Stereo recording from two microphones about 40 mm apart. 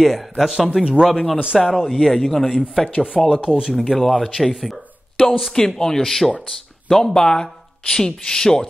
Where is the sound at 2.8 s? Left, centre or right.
Centre.